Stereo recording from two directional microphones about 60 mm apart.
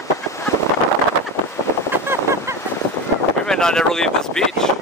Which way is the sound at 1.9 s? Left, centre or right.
Right.